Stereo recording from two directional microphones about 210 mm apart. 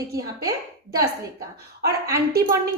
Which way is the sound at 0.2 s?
15° right (ahead or behind).